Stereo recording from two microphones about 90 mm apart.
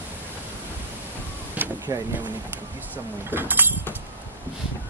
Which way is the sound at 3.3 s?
20° right (ahead or behind).